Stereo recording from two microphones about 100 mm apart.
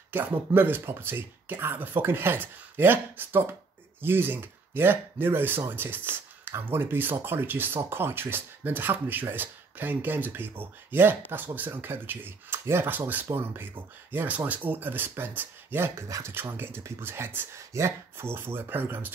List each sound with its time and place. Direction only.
0.1 s speech: 20° right (ahead or behind)